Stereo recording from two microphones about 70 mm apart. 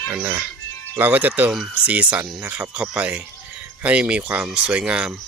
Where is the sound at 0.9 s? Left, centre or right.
Right.